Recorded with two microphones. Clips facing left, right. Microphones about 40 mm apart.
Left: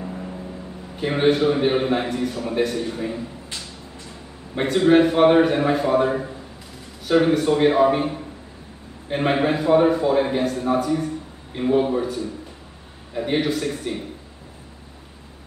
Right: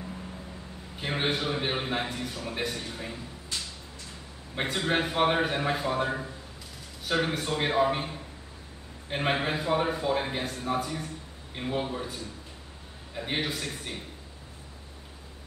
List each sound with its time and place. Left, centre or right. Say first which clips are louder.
0.0 s a sound: left 8 dB; left
0.9 s a man's voice: left 10 dB; centre
4.6 s a man's voice: left 12 dB; centre
13.1 s a man's voice: left 9 dB; centre